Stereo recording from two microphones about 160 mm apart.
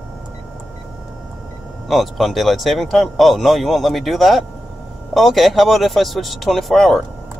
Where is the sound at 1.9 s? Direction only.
Centre (ahead or behind).